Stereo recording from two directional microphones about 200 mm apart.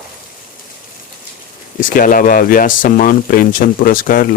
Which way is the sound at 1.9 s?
45° left (ahead or behind).